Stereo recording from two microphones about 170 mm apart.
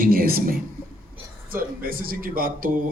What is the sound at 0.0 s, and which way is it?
Speech, 60° right (ahead or behind).